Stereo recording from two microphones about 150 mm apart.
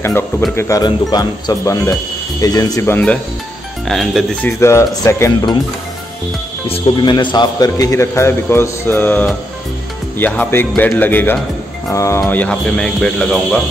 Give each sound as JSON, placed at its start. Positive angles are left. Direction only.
{"t": 0.6, "sound": "a man's voice", "side_deg": 20}
{"t": 3.8, "sound": "speech", "side_deg": 0}
{"t": 4.5, "sound": "a man's voice", "side_deg": 20}
{"t": 6.7, "sound": "a man's voice", "side_deg": 30}